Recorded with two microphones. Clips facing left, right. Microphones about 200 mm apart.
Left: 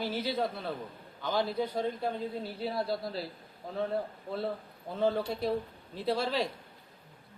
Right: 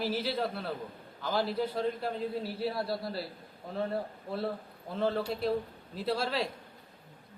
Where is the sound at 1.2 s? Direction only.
Centre (ahead or behind).